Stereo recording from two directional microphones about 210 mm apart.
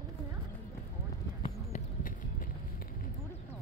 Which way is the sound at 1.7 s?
40° left (ahead or behind).